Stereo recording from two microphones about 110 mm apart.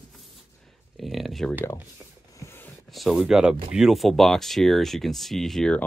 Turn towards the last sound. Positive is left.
turn(degrees=5)  # may be behind; listen again after turning